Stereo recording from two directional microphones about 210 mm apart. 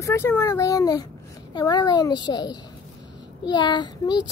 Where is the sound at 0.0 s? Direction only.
10° left (ahead or behind).